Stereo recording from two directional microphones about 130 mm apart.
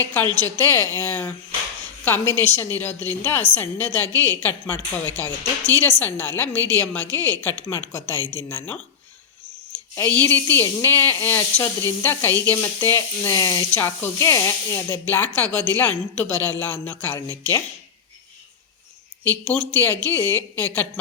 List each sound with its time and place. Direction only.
0.3 s speech: 15° left (ahead or behind)
2.5 s speech: 15° left (ahead or behind)
9.7 s a sound: 15° left (ahead or behind)
10.2 s speech: 15° left (ahead or behind)
13.7 s speech: 15° left (ahead or behind)
19.2 s speech: 10° left (ahead or behind)